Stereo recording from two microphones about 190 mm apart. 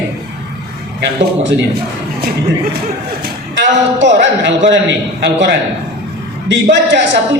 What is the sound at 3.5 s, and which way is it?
A man's voice, 70° right (ahead or behind).